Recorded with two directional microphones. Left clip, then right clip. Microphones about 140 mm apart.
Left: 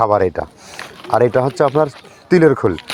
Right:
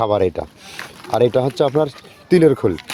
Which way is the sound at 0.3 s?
5° right (ahead or behind).